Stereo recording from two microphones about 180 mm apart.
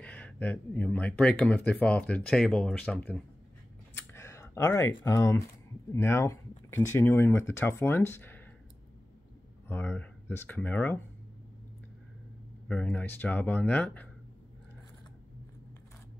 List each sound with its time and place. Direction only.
0.0 s speech: 10° left (ahead or behind)
3.9 s clicking: 15° left (ahead or behind)
5.0 s speech: 15° left (ahead or behind)
9.7 s speech: 10° left (ahead or behind)
12.6 s speech: 5° left (ahead or behind)